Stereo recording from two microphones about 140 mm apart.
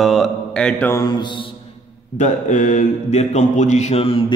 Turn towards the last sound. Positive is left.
turn(degrees=45)  # may be behind; listen again after turning